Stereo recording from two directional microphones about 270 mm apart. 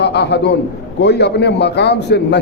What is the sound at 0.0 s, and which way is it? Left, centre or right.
A man's voice, left.